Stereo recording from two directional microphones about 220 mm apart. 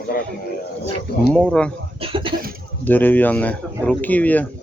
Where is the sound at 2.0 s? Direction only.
25° right (ahead or behind).